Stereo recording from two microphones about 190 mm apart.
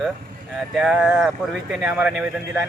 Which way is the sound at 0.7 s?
5° right (ahead or behind).